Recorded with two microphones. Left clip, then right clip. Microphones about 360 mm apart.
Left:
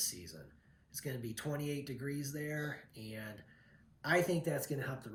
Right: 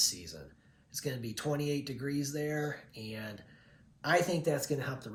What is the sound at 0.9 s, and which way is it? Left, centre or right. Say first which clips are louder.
Speech: right 5 dB; centre.